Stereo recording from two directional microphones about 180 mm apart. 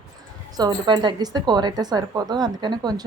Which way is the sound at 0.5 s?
20° right (ahead or behind).